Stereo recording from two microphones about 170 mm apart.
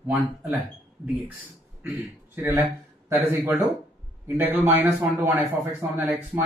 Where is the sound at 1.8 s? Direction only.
15° right (ahead or behind).